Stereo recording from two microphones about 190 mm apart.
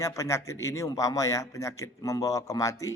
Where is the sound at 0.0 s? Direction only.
15° left (ahead or behind).